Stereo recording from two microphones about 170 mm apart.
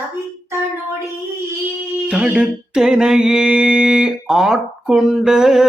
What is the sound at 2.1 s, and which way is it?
Mantra, 5° right (ahead or behind).